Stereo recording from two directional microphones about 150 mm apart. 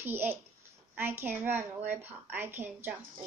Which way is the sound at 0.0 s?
15° right (ahead or behind).